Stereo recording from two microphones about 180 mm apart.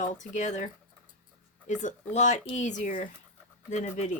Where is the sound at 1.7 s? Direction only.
45° left (ahead or behind).